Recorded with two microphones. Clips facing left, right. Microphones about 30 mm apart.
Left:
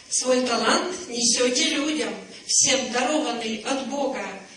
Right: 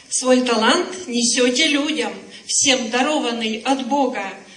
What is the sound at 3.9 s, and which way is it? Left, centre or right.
Speech, right.